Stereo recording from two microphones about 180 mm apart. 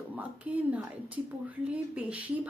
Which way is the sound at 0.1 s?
10° right (ahead or behind).